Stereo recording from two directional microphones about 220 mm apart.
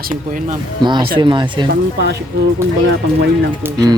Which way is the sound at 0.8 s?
20° right (ahead or behind).